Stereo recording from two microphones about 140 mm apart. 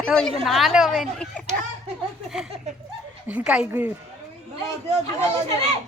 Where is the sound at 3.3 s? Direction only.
5° right (ahead or behind).